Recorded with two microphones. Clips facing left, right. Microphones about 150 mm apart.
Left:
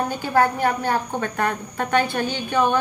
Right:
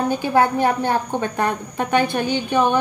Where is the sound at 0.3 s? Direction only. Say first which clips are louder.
Right 1 dB; 20° right (ahead or behind).